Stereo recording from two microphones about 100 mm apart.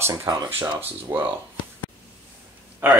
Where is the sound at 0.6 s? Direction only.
20° right (ahead or behind).